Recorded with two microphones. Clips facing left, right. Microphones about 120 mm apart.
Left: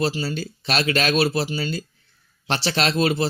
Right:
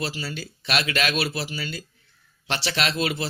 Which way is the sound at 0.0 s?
30° left (ahead or behind).